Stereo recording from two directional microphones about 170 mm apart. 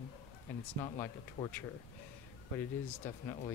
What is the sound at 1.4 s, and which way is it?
Speech, 25° left (ahead or behind).